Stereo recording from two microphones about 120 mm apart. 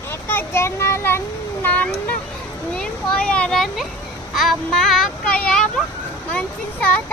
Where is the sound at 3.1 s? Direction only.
10° left (ahead or behind).